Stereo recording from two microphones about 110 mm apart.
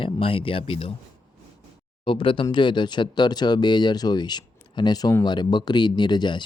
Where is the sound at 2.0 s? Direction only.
50° left (ahead or behind).